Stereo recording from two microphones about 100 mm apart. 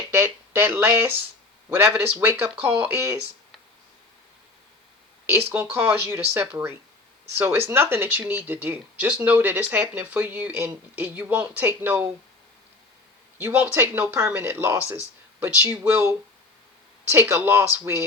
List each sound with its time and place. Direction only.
0.2 s speech: 20° right (ahead or behind)
5.5 s speech: 25° right (ahead or behind)
13.5 s speech: 15° right (ahead or behind)
17.1 s speech: 25° right (ahead or behind)